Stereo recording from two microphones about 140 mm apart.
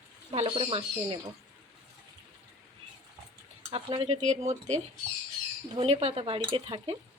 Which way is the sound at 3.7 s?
40° right (ahead or behind).